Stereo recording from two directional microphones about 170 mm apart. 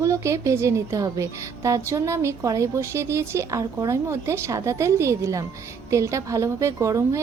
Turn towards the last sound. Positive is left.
turn(degrees=-15)  # may be behind; listen again after turning